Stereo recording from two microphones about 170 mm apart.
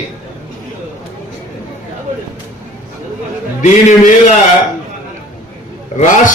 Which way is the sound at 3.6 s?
45° left (ahead or behind).